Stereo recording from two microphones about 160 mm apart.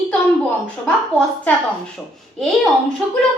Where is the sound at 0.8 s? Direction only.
5° left (ahead or behind).